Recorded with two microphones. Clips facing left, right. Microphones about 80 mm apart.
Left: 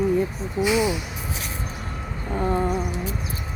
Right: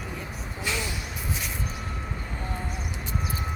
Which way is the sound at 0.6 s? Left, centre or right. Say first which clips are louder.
Left 11 dB; centre.